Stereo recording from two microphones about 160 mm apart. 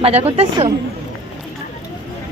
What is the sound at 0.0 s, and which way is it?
Speech, 40° right (ahead or behind).